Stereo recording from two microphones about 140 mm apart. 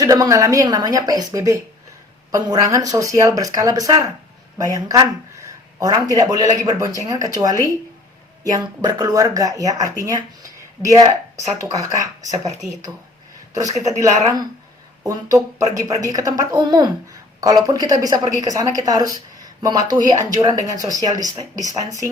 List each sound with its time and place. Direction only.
0.0 s speech: 25° right (ahead or behind)
15.0 s speech: 25° right (ahead or behind)